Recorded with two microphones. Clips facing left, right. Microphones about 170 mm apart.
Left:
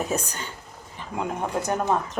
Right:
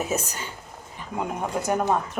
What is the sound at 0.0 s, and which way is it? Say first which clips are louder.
A woman's voice: even; 5° right (ahead or behind).